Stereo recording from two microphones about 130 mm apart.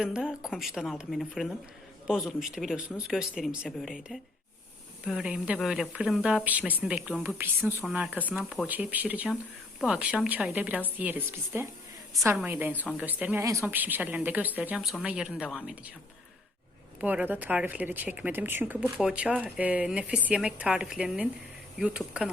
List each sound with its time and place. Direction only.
0.0 s speech: 5° right (ahead or behind)
13.4 s speech: 20° right (ahead or behind)
17.0 s speech: 10° right (ahead or behind)